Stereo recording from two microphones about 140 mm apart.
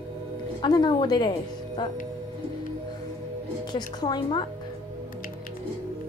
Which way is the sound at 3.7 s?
30° left (ahead or behind).